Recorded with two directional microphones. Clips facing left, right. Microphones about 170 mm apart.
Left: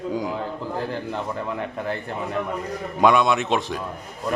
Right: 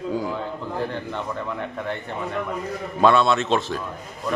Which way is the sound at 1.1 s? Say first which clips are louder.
Left 1 dB; 35° left (ahead or behind).